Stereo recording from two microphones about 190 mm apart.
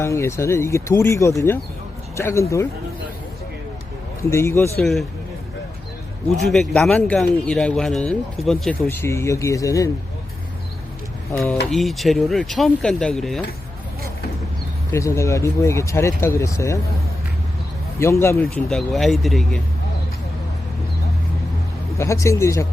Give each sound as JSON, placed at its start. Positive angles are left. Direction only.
{"t": 0.0, "sound": "speech", "side_deg": 15}
{"t": 4.2, "sound": "speech", "side_deg": 15}
{"t": 4.8, "sound": "speech", "side_deg": 0}
{"t": 6.4, "sound": "speech", "side_deg": 0}
{"t": 9.0, "sound": "speech", "side_deg": 15}
{"t": 11.7, "sound": "speech", "side_deg": 0}
{"t": 14.9, "sound": "speech", "side_deg": 15}
{"t": 18.0, "sound": "speech", "side_deg": 15}
{"t": 18.4, "sound": "speech", "side_deg": 0}
{"t": 21.9, "sound": "speech", "side_deg": 15}